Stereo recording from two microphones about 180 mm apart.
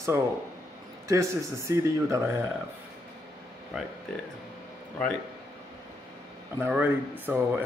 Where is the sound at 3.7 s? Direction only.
Centre (ahead or behind).